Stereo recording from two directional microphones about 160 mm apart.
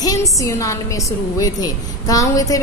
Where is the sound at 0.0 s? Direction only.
20° left (ahead or behind).